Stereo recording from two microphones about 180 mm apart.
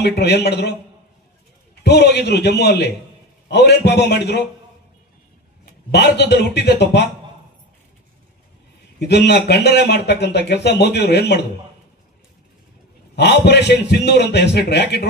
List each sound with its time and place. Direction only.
0.0 s speech: 70° left (ahead or behind)
1.8 s speech: 70° left (ahead or behind)
5.9 s speech: 70° left (ahead or behind)
9.0 s speech: 70° left (ahead or behind)
13.1 s speech: 70° left (ahead or behind)